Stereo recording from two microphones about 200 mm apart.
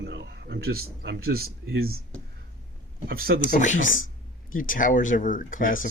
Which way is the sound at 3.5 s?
40° left (ahead or behind).